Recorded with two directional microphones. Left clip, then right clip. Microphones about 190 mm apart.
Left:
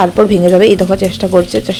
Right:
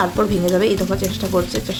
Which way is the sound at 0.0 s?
35° left (ahead or behind).